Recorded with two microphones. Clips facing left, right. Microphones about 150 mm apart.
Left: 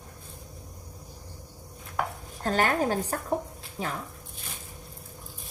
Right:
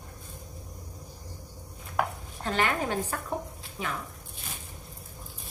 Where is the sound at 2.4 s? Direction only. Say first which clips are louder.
Left 3 dB; 40° left (ahead or behind).